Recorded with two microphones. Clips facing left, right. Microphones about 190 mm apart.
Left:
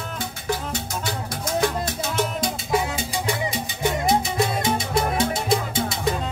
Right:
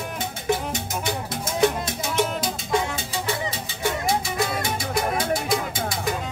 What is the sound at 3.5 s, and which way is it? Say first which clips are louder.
Music: left 2 dB; 20° left (ahead or behind).